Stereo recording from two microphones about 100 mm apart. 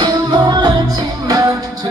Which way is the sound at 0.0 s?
45° right (ahead or behind).